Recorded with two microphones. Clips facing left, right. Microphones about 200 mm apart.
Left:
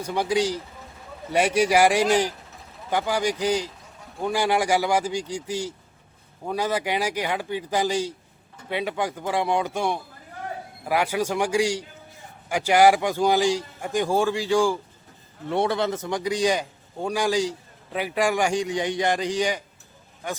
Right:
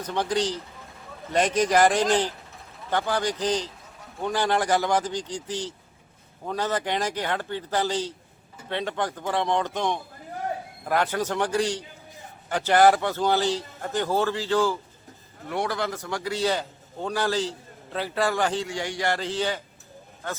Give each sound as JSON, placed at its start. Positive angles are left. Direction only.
{"t": 0.0, "sound": "a man's voice", "side_deg": 10}
{"t": 15.4, "sound": "a man's voice", "side_deg": 25}